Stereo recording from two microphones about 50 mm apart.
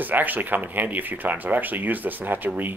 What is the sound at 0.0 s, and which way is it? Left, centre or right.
Speech, right.